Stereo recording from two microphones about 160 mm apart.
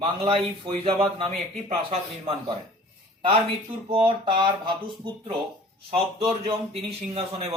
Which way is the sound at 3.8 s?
30° right (ahead or behind).